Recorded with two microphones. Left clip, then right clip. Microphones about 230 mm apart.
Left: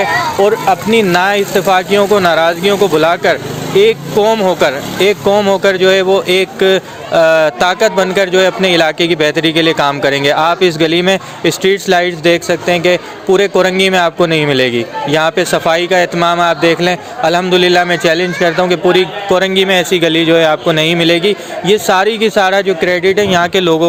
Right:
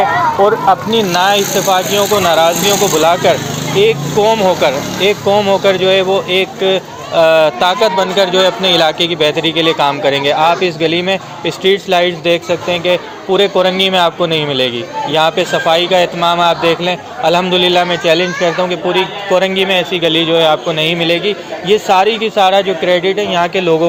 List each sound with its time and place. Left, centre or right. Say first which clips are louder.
0.4 s speech: even; left